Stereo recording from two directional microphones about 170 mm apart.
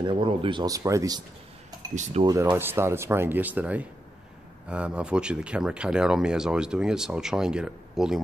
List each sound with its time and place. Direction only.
0.0 s speech: 30° right (ahead or behind)
2.2 s speech: 25° right (ahead or behind)
2.5 s speech: 15° right (ahead or behind)